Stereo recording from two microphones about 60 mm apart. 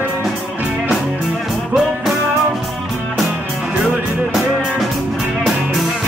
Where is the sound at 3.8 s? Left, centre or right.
Centre.